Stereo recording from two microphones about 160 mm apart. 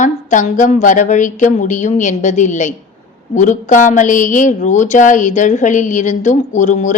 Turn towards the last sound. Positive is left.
turn(degrees=50)  # may be behind; listen again after turning